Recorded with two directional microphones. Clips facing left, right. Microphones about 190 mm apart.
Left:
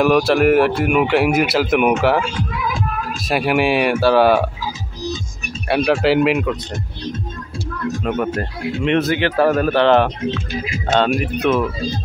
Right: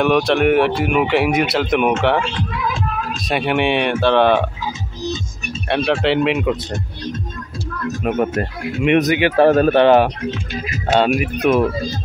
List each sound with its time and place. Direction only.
0.0 s speech: centre (ahead or behind)
5.9 s speech: centre (ahead or behind)
8.0 s speech: 20° right (ahead or behind)
9.5 s speech: 30° right (ahead or behind)
9.8 s speech: 10° right (ahead or behind)